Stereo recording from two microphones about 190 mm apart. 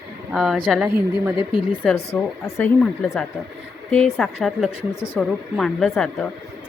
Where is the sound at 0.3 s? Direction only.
Centre (ahead or behind).